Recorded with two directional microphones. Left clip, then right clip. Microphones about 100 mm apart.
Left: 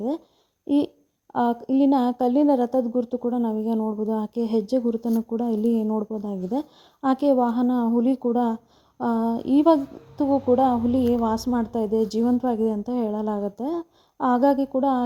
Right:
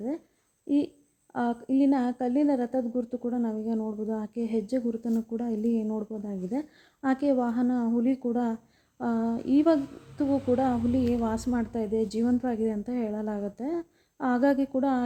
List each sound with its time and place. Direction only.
1.3 s a woman's voice: 30° left (ahead or behind)
5.6 s speech: 45° left (ahead or behind)
6.1 s a woman's voice: 30° left (ahead or behind)